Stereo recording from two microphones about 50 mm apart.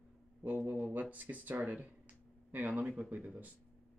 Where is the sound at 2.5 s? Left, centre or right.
Right.